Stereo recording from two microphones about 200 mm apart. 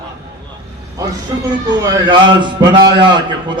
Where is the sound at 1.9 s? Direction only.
20° right (ahead or behind).